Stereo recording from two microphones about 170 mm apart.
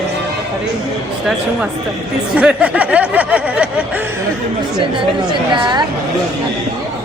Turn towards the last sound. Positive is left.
turn(degrees=-25)  # may be behind; listen again after turning